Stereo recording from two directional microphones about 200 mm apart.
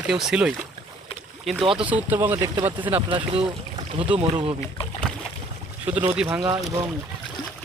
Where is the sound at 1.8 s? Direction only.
5° right (ahead or behind).